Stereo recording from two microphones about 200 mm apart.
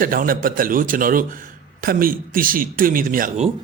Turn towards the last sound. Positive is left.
turn(degrees=-45)  # may be behind; listen again after turning